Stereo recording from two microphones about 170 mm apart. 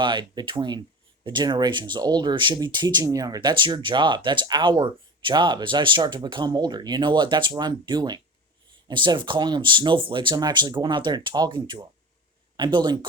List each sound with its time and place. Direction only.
0.0 s speech: 25° right (ahead or behind)